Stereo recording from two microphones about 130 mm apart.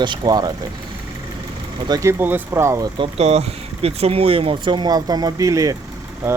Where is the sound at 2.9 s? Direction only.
40° right (ahead or behind).